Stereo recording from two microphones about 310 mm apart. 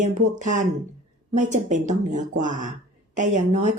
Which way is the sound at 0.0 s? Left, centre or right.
Right.